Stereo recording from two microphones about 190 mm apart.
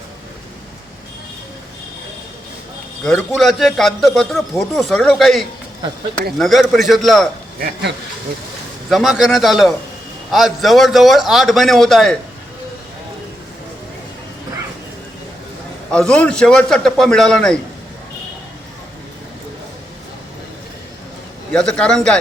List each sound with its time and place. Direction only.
3.0 s a man's voice: 5° left (ahead or behind)
7.6 s speech: 65° right (ahead or behind)
8.9 s a man's voice: centre (ahead or behind)
15.9 s a man's voice: 5° left (ahead or behind)
21.5 s a man's voice: 5° left (ahead or behind)